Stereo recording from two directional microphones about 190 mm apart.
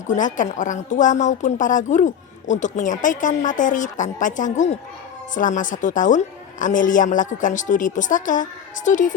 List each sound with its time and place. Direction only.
0.1 s a woman's voice: 45° left (ahead or behind)